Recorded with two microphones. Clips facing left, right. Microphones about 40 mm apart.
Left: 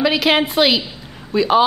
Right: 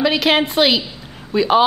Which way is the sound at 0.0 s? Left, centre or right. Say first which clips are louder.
Even; centre.